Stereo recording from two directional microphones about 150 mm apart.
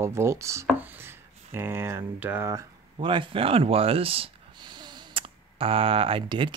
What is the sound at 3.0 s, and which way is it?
Speech, 35° right (ahead or behind).